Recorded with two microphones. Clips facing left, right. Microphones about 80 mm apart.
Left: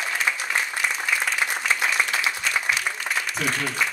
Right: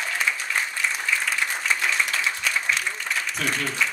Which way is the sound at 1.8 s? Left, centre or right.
Centre.